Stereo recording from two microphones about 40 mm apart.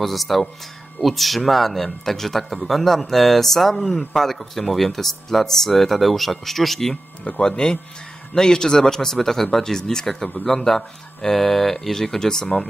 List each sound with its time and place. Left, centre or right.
0.0 s speech: centre
7.2 s speech: left